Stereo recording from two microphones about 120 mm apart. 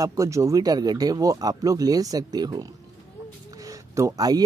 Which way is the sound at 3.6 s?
25° right (ahead or behind).